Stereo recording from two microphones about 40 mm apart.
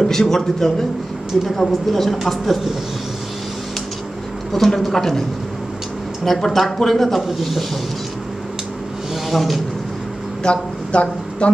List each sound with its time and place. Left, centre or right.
0.0 s a man's voice: centre
4.5 s a woman's voice: centre
6.2 s a woman's voice: centre
9.3 s a woman's voice: centre
10.4 s speech: left